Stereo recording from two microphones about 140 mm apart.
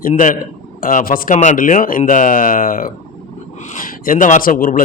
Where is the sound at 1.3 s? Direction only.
60° left (ahead or behind); by 2.9 s 90° left.